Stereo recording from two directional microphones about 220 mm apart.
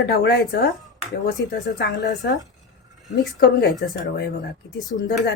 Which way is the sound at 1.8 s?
50° left (ahead or behind).